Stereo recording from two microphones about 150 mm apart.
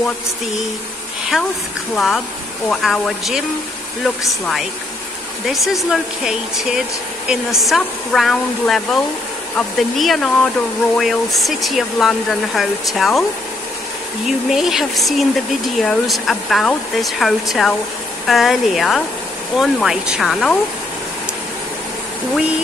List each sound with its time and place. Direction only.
2.0 s speech: centre (ahead or behind)
14.2 s speech: 5° right (ahead or behind)